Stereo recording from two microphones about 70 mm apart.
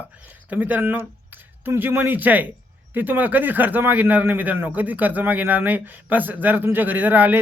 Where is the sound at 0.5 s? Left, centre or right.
Right.